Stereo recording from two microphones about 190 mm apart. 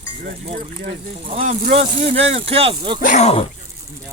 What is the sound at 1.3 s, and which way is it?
Speech, 30° right (ahead or behind).